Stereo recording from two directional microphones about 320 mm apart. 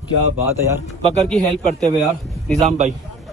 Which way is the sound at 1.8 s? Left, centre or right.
Centre.